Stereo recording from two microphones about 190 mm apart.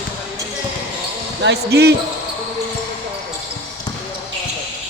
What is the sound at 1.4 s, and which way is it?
Speech, 60° right (ahead or behind).